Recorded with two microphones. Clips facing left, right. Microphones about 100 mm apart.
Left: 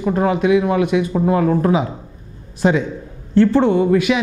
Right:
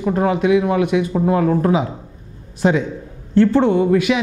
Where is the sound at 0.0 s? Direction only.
20° left (ahead or behind).